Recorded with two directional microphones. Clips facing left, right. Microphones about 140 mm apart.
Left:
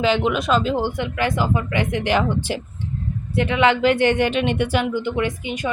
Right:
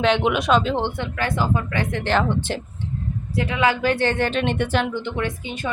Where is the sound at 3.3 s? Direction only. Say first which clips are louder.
Left 3 dB; 25° left (ahead or behind).